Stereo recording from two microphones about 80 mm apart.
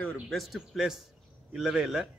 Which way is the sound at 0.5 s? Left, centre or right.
Centre.